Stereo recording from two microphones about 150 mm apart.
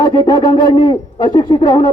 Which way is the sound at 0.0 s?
30° left (ahead or behind).